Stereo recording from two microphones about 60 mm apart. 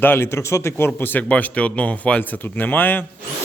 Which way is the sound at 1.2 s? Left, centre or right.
Left.